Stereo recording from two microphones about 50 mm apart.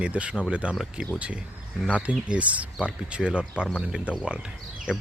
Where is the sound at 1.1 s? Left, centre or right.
Right.